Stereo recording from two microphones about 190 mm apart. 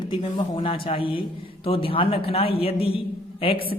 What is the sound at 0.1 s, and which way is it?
A woman's voice, 25° left (ahead or behind).